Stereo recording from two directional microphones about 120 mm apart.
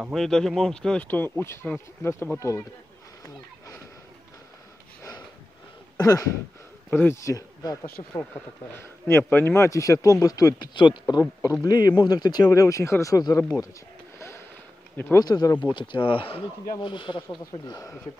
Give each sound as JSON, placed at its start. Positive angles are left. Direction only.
{"t": 0.1, "sound": "speech", "side_deg": 5}
{"t": 5.9, "sound": "speech", "side_deg": 30}
{"t": 6.9, "sound": "speech", "side_deg": 20}
{"t": 7.8, "sound": "speech", "side_deg": 20}
{"t": 14.1, "sound": "a sound", "side_deg": 25}
{"t": 15.1, "sound": "speech", "side_deg": 30}
{"t": 17.4, "sound": "speech", "side_deg": 30}